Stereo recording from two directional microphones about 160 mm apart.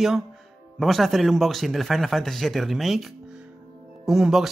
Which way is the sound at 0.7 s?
Centre (ahead or behind).